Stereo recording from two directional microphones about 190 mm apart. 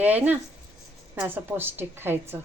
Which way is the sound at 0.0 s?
10° right (ahead or behind).